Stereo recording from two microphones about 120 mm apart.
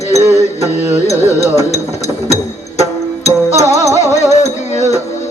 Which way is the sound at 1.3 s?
65° left (ahead or behind).